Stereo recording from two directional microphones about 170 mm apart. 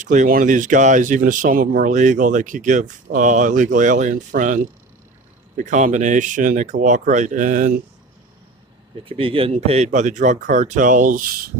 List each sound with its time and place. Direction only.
0.0 s speech: 50° right (ahead or behind)
9.0 s speech: 30° right (ahead or behind); by 11.3 s 55° right (ahead or behind)